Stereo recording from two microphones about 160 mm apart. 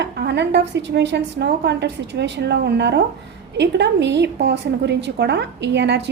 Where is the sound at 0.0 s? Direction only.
90° right.